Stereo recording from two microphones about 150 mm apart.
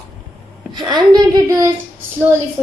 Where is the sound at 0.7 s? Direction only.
30° right (ahead or behind).